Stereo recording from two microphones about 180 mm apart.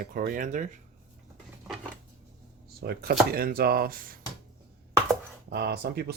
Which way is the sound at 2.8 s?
65° right (ahead or behind).